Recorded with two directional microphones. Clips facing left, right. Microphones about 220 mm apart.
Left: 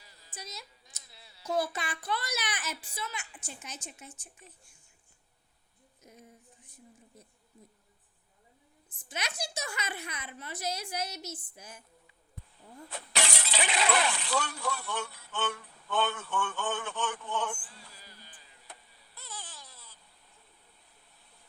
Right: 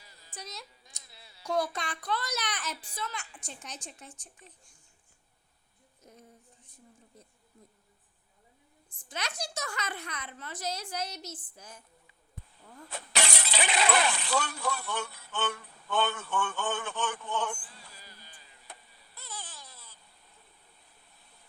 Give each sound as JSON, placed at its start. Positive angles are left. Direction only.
{"t": 0.3, "sound": "a woman's voice", "side_deg": 0}
{"t": 9.0, "sound": "a woman's voice", "side_deg": 10}
{"t": 13.1, "sound": "speech", "side_deg": -50}
{"t": 19.1, "sound": "a sound", "side_deg": -50}